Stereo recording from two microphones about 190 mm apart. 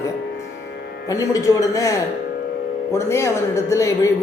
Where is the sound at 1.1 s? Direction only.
15° left (ahead or behind).